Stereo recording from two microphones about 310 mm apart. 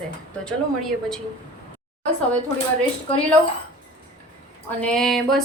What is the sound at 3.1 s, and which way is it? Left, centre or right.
Speech, centre.